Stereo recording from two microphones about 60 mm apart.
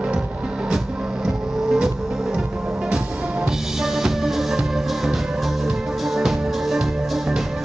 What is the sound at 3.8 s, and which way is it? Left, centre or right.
Music, centre.